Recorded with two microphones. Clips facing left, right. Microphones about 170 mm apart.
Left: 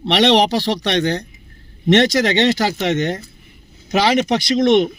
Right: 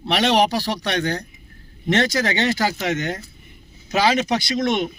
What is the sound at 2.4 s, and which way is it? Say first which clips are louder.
Speech: left 4 dB; 20° left (ahead or behind).